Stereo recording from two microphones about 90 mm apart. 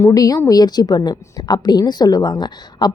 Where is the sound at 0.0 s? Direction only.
40° left (ahead or behind).